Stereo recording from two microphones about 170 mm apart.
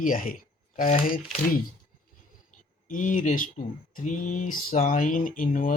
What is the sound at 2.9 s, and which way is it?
Speech, 50° left (ahead or behind).